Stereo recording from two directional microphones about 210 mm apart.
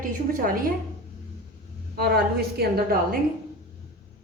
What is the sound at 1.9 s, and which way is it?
A woman's voice, 50° right (ahead or behind).